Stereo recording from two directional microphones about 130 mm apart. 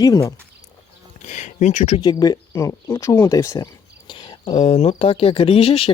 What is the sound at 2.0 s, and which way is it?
Speech, 30° left (ahead or behind).